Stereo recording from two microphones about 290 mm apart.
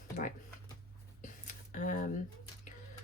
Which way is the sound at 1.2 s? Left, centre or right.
Left.